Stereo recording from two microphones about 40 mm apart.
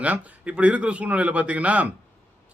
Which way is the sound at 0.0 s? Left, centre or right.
Right.